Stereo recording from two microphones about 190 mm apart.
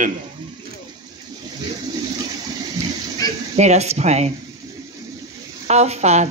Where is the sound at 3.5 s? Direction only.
35° right (ahead or behind).